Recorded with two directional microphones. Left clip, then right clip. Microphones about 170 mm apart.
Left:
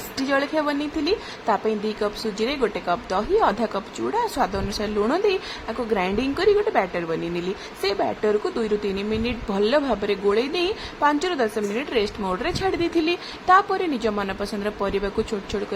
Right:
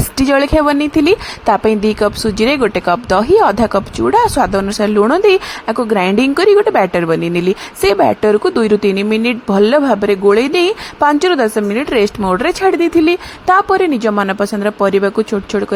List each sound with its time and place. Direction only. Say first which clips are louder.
0.2 s a woman's voice: right 11 dB; 50° right (ahead or behind)